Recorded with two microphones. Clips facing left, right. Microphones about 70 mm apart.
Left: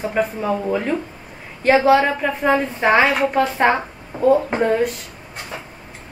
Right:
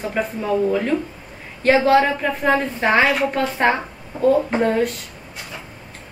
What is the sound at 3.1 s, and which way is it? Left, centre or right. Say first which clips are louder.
Speech: left 2 dB; left.